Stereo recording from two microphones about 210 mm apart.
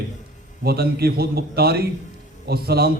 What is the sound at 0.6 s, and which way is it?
A man's voice, 50° right (ahead or behind).